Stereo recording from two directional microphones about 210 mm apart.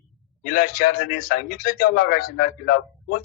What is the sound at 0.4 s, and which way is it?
Speech, 45° left (ahead or behind).